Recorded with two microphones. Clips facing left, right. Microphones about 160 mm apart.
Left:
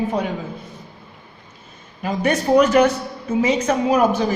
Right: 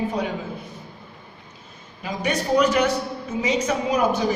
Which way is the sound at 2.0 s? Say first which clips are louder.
Left 5 dB; 50° left (ahead or behind).